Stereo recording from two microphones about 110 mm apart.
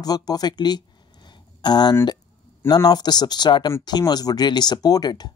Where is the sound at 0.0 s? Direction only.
35° left (ahead or behind).